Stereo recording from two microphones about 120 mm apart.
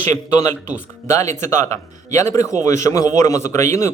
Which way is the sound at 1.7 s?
25° left (ahead or behind).